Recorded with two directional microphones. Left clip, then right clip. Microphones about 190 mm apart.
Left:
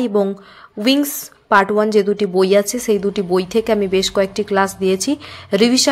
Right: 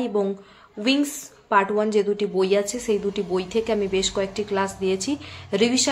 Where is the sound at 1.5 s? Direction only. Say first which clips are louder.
Left 7 dB; 35° left (ahead or behind).